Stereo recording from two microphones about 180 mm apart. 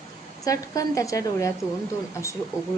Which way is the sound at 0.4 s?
20° left (ahead or behind).